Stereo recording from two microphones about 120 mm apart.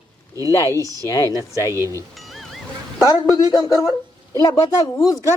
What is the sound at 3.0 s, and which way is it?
Speech, 35° left (ahead or behind).